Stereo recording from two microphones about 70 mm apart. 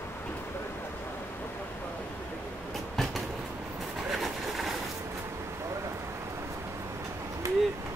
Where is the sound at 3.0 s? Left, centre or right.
Centre.